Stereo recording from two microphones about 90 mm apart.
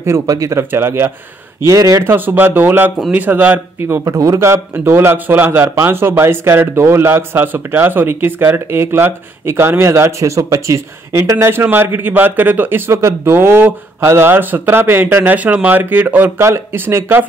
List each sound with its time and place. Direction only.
0.0 s a man's voice: 35° right (ahead or behind)
1.6 s speech: 35° right (ahead or behind)
2.0 s a man's voice: 20° right (ahead or behind)
3.8 s a man's voice: 30° right (ahead or behind)